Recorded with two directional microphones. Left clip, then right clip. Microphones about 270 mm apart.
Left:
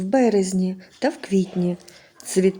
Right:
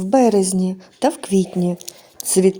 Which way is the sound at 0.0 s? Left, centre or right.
Centre.